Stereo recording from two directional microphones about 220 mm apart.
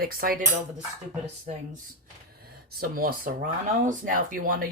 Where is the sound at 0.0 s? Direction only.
40° right (ahead or behind).